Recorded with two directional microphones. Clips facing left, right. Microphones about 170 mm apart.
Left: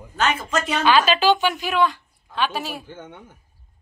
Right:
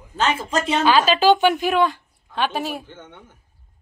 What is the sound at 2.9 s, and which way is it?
Speech, 10° left (ahead or behind).